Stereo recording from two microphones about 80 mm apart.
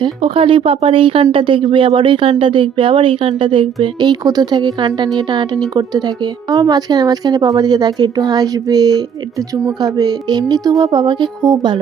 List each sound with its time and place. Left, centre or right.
0.0 s speech: right
4.0 s speech: right